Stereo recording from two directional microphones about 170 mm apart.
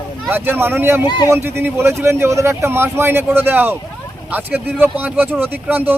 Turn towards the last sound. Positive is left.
turn(degrees=-10)  # may be behind; listen again after turning